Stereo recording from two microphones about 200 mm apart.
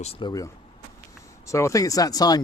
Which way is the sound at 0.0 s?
25° left (ahead or behind).